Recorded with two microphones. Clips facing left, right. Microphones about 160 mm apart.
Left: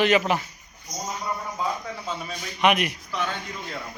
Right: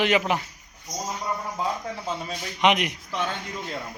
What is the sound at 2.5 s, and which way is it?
Speech, 20° right (ahead or behind).